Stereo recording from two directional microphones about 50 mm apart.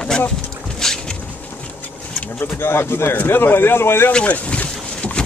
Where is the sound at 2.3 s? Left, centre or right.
Left.